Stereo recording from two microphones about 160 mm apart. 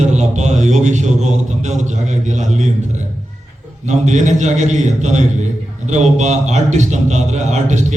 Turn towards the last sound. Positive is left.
turn(degrees=-45)  # may be behind; listen again after turning